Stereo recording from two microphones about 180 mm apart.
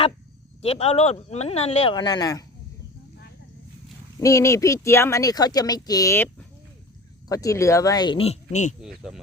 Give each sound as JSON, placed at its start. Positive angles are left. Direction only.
{"t": 0.6, "sound": "speech", "side_deg": 35}
{"t": 4.2, "sound": "speech", "side_deg": 15}